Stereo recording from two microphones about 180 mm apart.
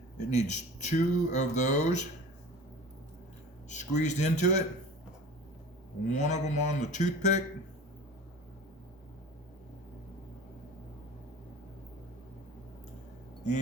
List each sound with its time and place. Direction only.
0.3 s speech: 40° left (ahead or behind)
3.7 s speech: 40° left (ahead or behind)
6.1 s speech: 40° left (ahead or behind)